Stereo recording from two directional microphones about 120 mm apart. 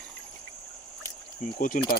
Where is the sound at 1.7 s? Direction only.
90° left.